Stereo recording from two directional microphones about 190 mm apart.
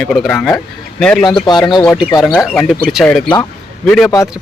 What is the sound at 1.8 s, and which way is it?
Speech, 5° left (ahead or behind).